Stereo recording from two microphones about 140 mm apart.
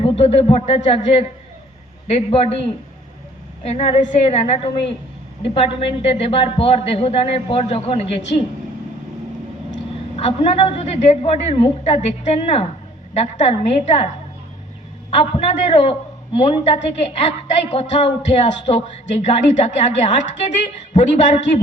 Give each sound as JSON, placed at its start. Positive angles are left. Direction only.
{"t": 0.0, "sound": "a man's voice", "side_deg": 45}
{"t": 10.2, "sound": "a man's voice", "side_deg": 45}
{"t": 15.1, "sound": "a man's voice", "side_deg": 55}